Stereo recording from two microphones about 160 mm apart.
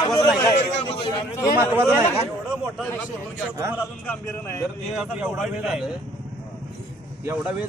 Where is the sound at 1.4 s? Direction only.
25° left (ahead or behind).